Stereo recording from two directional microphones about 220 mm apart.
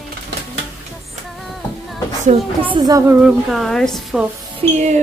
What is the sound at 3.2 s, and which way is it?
A woman's voice, centre (ahead or behind).